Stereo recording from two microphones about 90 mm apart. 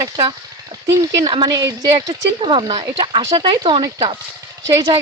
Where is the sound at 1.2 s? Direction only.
55° right (ahead or behind).